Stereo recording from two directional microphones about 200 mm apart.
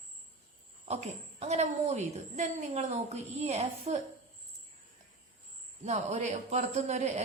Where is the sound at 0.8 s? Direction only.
30° right (ahead or behind).